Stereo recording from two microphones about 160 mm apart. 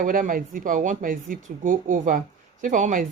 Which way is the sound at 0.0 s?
55° right (ahead or behind).